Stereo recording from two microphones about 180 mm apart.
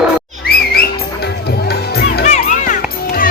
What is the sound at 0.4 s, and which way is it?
Music, 60° left (ahead or behind).